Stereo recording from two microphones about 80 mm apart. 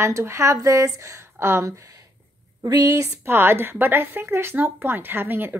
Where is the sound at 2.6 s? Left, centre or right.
Right.